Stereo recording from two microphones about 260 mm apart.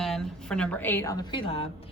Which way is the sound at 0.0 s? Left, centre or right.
Centre.